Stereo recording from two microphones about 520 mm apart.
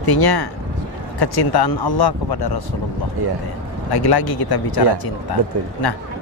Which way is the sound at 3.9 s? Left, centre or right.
Left.